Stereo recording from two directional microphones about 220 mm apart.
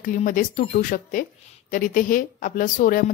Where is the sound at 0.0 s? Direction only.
35° left (ahead or behind).